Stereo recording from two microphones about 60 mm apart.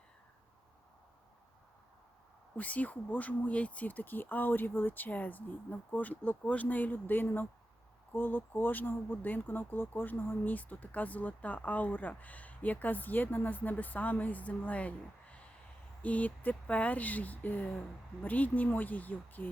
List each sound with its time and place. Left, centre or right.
2.6 s speech: left